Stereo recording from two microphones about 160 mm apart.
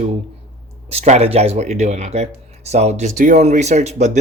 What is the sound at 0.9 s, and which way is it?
Speech, 45° right (ahead or behind).